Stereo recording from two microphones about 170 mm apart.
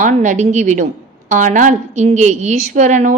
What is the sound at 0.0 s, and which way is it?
Speech, 50° right (ahead or behind).